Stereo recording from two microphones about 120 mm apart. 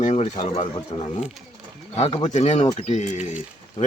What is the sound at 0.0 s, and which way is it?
Speech, 75° left (ahead or behind).